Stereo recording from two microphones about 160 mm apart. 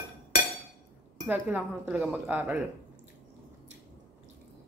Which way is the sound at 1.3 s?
10° right (ahead or behind).